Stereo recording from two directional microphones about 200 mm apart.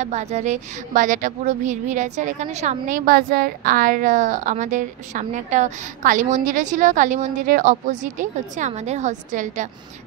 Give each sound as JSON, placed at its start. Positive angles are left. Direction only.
{"t": 0.0, "sound": "a woman's voice", "side_deg": -35}